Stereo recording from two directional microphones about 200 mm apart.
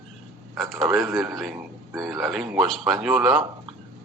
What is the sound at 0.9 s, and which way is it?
Speech, 15° right (ahead or behind).